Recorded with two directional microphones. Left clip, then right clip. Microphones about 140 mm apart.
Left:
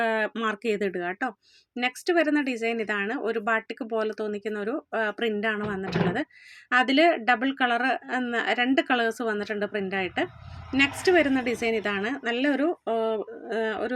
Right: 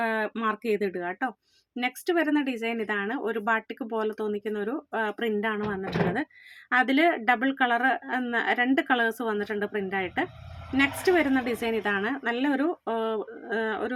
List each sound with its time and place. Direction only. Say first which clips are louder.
0.0 s speech: left 2 dB; 15° left (ahead or behind)